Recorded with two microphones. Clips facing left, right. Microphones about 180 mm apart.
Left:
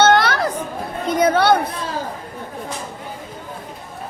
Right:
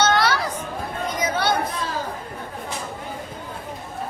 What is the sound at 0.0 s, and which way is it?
Chatter, 55° left (ahead or behind).